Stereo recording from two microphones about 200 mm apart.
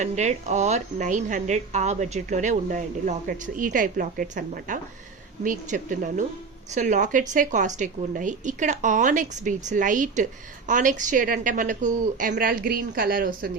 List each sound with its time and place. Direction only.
0.0 s a woman's voice: 35° right (ahead or behind)